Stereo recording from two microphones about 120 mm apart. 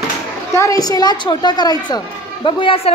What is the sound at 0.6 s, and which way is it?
A child's voice, 30° left (ahead or behind).